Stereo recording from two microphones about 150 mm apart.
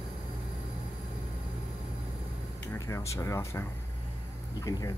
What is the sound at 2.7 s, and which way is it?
Speech, 20° left (ahead or behind).